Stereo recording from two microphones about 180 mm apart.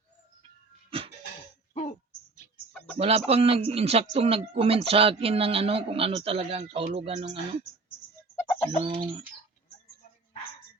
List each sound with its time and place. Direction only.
0.9 s cough: 30° right (ahead or behind)
1.7 s a sound: 40° left (ahead or behind)
2.7 s a sound: 5° left (ahead or behind)
3.0 s speech: 35° right (ahead or behind)
8.4 s bird: 15° left (ahead or behind)
8.8 s bird: 30° right (ahead or behind)